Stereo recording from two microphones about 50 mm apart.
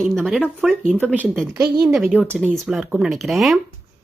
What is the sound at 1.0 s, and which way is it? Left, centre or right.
Speech, right.